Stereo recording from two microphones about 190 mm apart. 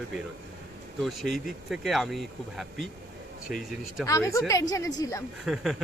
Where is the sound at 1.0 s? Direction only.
Centre (ahead or behind).